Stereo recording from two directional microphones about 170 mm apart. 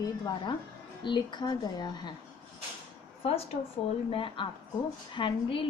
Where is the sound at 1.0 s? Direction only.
25° left (ahead or behind).